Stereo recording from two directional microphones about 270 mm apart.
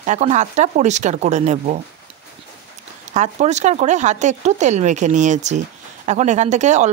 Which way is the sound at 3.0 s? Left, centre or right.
Right.